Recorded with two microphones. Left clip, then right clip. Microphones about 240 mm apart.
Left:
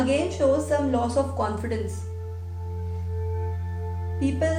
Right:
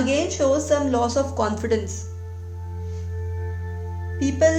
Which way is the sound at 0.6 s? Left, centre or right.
Right.